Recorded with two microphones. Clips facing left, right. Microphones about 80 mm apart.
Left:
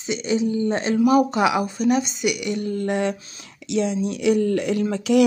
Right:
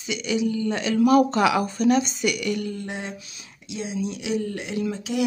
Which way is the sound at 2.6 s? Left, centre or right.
Left.